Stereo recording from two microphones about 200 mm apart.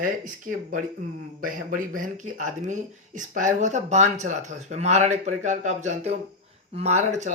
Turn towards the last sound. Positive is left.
turn(degrees=-35)  # may be behind; listen again after turning